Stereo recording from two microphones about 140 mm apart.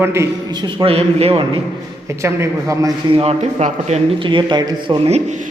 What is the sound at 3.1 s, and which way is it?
Speech, 40° right (ahead or behind).